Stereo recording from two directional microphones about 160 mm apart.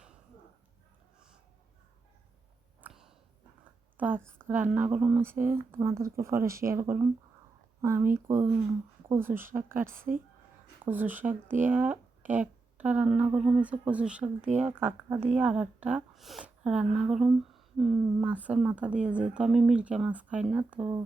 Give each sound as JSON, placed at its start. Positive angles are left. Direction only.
{"t": 2.8, "sound": "a sound", "side_deg": -10}
{"t": 4.4, "sound": "a woman's voice", "side_deg": -10}
{"t": 10.8, "sound": "a woman's voice", "side_deg": -10}